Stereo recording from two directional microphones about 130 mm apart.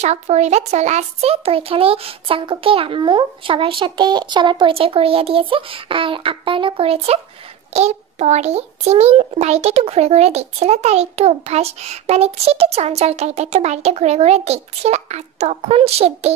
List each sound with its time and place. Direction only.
0.0 s a child's voice: 60° right (ahead or behind)